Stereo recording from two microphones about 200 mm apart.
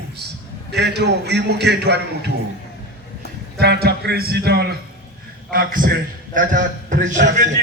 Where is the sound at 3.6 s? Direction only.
50° right (ahead or behind).